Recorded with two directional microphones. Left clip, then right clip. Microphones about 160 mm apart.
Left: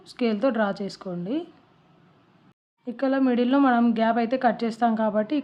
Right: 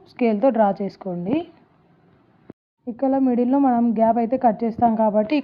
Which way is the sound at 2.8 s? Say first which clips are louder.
Right 3 dB; 15° right (ahead or behind).